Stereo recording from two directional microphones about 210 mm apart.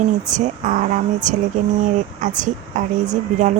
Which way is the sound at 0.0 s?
35° right (ahead or behind).